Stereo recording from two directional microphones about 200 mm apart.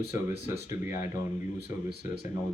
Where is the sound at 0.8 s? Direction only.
45° left (ahead or behind).